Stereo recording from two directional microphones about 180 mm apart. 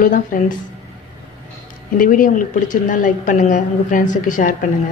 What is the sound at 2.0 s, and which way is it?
A woman's voice, 50° left (ahead or behind).